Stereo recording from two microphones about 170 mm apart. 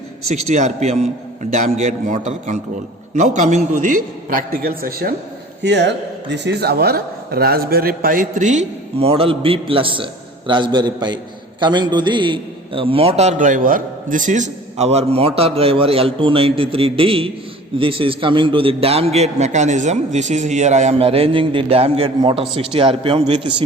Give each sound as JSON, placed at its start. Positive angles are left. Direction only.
{"t": 0.3, "sound": "a man's voice", "side_deg": -45}
{"t": 5.6, "sound": "speech", "side_deg": -90}
{"t": 9.0, "sound": "a man's voice", "side_deg": -35}